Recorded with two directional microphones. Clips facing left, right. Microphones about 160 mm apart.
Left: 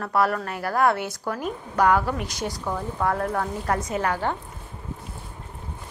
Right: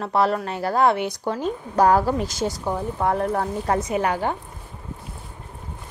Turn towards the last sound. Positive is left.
turn(degrees=-15)  # may be behind; listen again after turning